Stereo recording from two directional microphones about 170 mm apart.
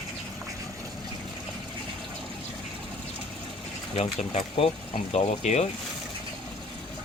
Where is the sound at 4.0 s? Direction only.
35° left (ahead or behind).